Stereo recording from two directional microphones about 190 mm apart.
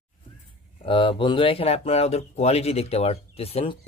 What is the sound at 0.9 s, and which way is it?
Speech, 25° left (ahead or behind).